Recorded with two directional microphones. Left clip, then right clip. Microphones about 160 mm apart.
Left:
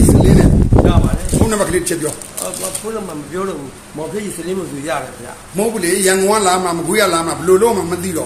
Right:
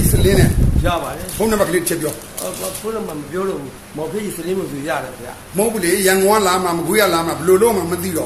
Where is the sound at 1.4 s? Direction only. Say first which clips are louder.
Right 1 dB; 10° left (ahead or behind).